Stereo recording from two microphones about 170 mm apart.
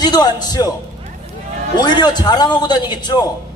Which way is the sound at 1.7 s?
25° left (ahead or behind).